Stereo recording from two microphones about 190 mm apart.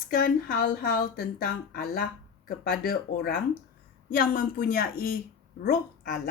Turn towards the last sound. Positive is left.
turn(degrees=50)  # may be behind; listen again after turning